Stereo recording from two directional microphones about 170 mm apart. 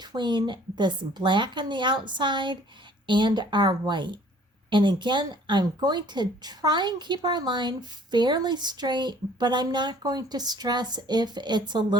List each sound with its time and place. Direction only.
0.0 s a woman's voice: 25° right (ahead or behind)